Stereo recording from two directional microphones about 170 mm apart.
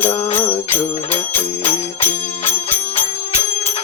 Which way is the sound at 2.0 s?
10° left (ahead or behind).